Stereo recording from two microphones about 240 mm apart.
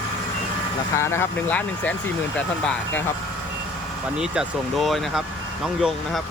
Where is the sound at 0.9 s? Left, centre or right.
Centre.